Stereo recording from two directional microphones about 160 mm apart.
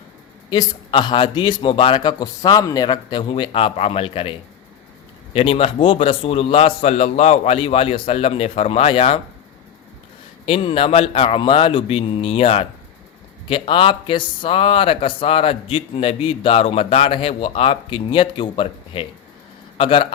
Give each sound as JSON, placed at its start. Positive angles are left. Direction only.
{"t": 0.5, "sound": "a man's voice", "side_deg": 25}
{"t": 10.4, "sound": "speech", "side_deg": 35}